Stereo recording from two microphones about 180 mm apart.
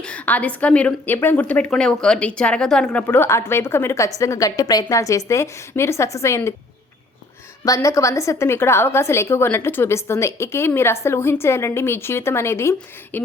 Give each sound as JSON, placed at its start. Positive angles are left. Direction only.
{"t": 0.0, "sound": "a woman's voice", "side_deg": 5}
{"t": 7.6, "sound": "a woman's voice", "side_deg": 20}